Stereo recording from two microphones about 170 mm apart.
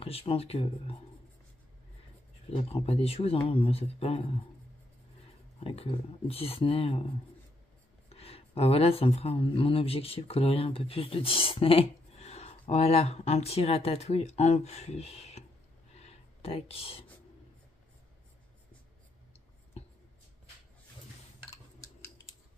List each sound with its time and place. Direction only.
0.0 s speech: 35° left (ahead or behind)
2.5 s speech: 35° left (ahead or behind)
5.6 s speech: 35° left (ahead or behind)
8.1 s speech: 35° left (ahead or behind)
15.9 s a sound: 40° left (ahead or behind)